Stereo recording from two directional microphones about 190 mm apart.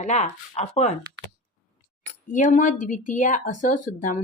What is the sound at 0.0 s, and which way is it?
Speech, 35° left (ahead or behind).